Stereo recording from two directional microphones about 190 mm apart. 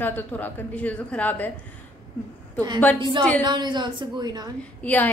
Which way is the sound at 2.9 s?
25° right (ahead or behind).